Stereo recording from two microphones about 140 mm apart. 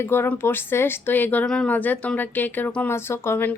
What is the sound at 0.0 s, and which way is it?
Speech, 15° left (ahead or behind).